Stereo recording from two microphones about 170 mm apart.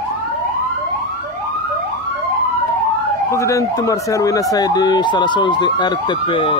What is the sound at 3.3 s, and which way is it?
Speech, 15° left (ahead or behind).